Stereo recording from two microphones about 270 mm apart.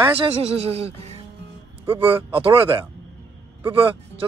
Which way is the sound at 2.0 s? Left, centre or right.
Centre.